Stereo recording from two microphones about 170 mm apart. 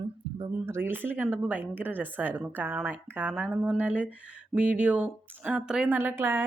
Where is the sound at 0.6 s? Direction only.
15° right (ahead or behind).